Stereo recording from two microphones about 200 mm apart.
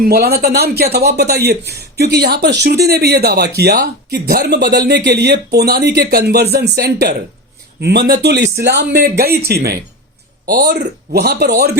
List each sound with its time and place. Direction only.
0.0 s speech: 50° right (ahead or behind)